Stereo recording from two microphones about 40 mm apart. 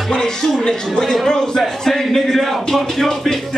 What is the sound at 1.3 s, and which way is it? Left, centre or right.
Speech, centre.